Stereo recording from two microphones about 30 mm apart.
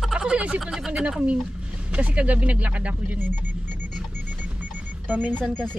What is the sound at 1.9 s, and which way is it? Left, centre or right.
Speech, right.